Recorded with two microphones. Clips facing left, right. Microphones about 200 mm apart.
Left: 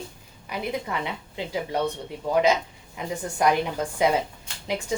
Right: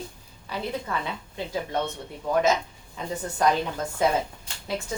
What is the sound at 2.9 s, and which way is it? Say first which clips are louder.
A woman's voice: left 1 dB; 15° left (ahead or behind).